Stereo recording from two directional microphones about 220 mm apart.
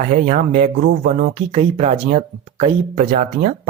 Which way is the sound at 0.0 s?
35° right (ahead or behind).